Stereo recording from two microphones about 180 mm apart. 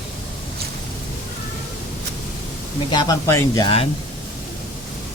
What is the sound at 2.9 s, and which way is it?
Speech, 20° left (ahead or behind).